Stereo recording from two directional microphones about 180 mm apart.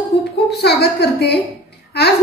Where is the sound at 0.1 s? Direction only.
70° left (ahead or behind).